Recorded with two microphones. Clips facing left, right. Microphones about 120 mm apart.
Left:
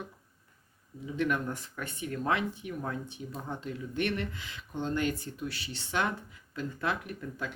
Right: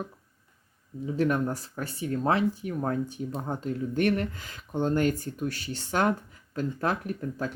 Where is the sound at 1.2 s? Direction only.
35° right (ahead or behind).